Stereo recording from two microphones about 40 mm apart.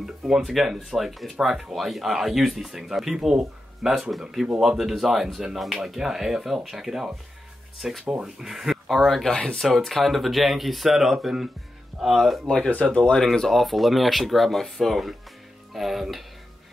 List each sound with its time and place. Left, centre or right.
0.0 s speech: centre
8.1 s speech: centre
8.8 s speech: centre
12.4 s speech: centre
13.2 s speech: centre